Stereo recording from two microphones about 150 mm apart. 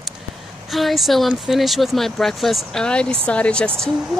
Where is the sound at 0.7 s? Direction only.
Centre (ahead or behind).